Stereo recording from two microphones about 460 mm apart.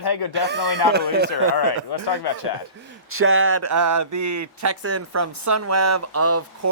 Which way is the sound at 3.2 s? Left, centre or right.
Right.